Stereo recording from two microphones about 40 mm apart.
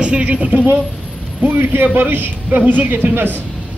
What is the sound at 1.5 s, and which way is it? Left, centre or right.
A man's voice, right.